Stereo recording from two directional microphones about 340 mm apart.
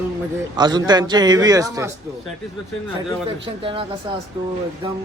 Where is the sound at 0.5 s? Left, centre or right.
Centre.